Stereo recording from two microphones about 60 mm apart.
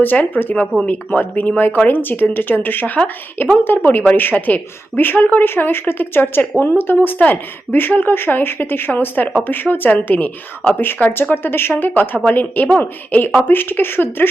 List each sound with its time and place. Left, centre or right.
0.0 s a woman's voice: left